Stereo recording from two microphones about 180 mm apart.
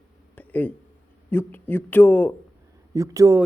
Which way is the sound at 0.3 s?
10° left (ahead or behind).